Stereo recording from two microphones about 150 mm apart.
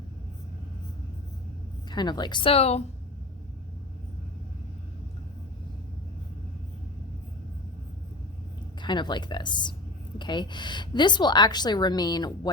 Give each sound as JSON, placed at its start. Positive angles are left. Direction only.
{"t": 1.9, "sound": "a woman's voice", "side_deg": 30}
{"t": 8.8, "sound": "a woman's voice", "side_deg": 30}